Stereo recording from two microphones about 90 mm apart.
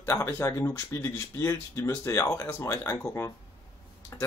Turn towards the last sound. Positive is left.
turn(degrees=35)  # may be behind; listen again after turning